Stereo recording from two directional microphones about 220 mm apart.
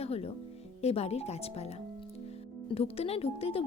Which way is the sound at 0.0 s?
25° left (ahead or behind).